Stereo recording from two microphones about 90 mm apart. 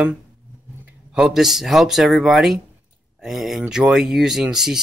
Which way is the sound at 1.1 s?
5° right (ahead or behind).